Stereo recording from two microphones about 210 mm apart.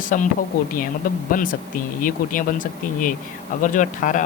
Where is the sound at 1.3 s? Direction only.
40° left (ahead or behind).